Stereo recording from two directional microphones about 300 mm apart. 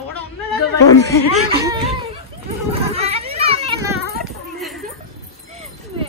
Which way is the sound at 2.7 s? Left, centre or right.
Centre.